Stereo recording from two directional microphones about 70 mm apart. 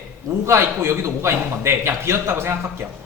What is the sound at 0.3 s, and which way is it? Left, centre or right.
A man's voice, right.